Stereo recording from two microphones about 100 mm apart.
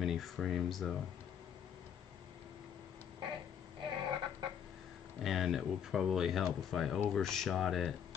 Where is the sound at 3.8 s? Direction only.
50° right (ahead or behind).